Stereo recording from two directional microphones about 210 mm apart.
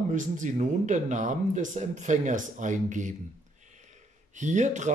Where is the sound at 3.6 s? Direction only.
35° right (ahead or behind).